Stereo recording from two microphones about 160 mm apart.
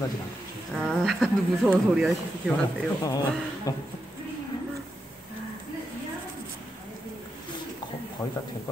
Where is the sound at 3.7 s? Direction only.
20° left (ahead or behind).